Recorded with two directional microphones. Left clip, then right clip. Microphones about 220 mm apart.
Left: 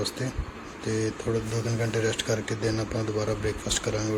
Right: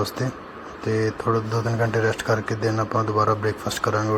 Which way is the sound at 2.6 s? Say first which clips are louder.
Right 6 dB; 5° right (ahead or behind).